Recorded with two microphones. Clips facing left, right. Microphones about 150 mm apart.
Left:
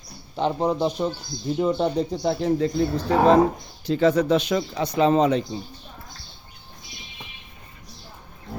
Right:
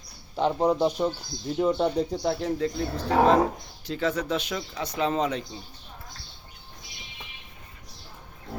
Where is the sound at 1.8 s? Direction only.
30° left (ahead or behind).